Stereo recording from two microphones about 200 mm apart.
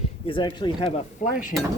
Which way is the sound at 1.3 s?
40° left (ahead or behind).